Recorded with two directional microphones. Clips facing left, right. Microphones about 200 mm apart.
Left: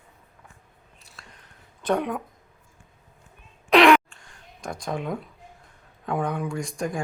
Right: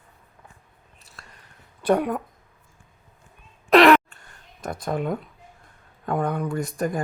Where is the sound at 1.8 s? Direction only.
5° right (ahead or behind).